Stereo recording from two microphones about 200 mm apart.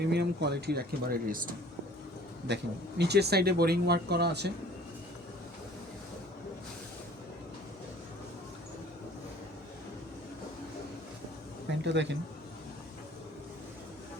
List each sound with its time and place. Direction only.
0.0 s speech: 55° right (ahead or behind)
2.5 s a man's voice: 60° right (ahead or behind)
11.8 s a man's voice: 60° right (ahead or behind)